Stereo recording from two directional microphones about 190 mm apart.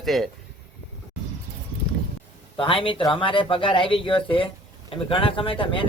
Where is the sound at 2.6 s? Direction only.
25° left (ahead or behind).